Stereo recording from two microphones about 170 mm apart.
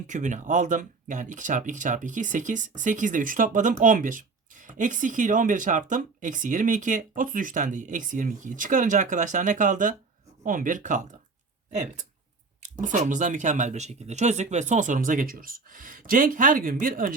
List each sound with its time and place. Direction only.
0.1 s speech: 45° right (ahead or behind)
12.8 s speech: 50° right (ahead or behind)